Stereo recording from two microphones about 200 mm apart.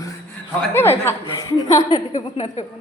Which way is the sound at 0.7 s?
10° left (ahead or behind).